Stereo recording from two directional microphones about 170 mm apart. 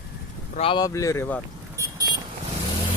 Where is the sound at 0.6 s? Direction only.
25° left (ahead or behind); by 1.4 s 10° left (ahead or behind).